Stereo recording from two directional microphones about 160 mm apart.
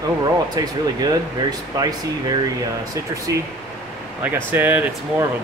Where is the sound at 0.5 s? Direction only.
25° right (ahead or behind).